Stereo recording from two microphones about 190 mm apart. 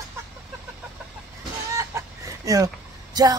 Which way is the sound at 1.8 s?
15° right (ahead or behind).